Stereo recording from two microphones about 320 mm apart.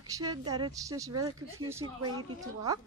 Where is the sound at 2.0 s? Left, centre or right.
Right.